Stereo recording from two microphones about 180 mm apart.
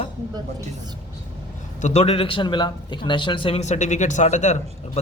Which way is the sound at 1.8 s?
35° left (ahead or behind).